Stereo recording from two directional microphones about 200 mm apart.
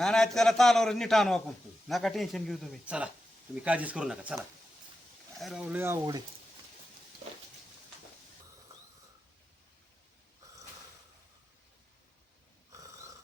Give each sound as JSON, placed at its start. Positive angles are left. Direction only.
{"t": 0.0, "sound": "a man's voice", "side_deg": 5}
{"t": 5.4, "sound": "speech", "side_deg": 0}
{"t": 12.7, "sound": "snoring", "side_deg": -15}